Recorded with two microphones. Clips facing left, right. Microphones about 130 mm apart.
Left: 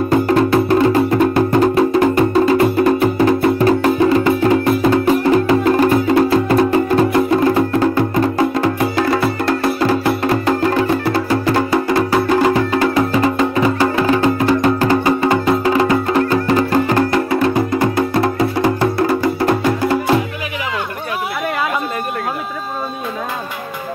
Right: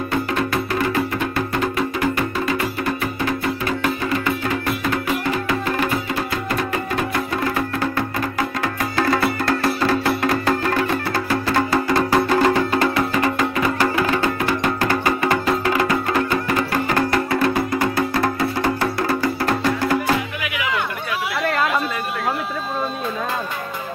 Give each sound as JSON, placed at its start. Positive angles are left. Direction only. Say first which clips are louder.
{"t": 0.1, "sound": "music", "louder": "left 9 dB", "side_deg": 35}
{"t": 9.0, "sound": "music", "louder": "even", "side_deg": 15}